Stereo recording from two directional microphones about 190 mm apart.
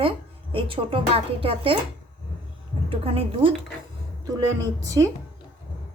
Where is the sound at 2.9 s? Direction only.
30° right (ahead or behind).